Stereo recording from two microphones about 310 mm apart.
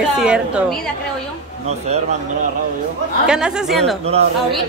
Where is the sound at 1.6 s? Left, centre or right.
Right.